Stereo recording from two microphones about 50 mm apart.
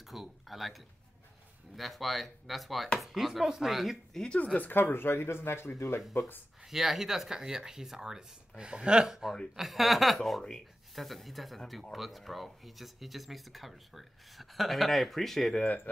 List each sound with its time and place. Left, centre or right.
0.0 s a sound: centre
1.8 s speech: centre
4.1 s speech: centre
4.6 s speech: left
6.1 s speech: left
6.6 s speech: centre